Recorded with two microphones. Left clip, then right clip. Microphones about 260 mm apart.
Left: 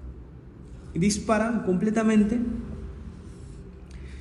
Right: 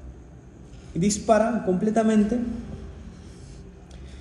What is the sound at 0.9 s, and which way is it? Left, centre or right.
A man's voice, left.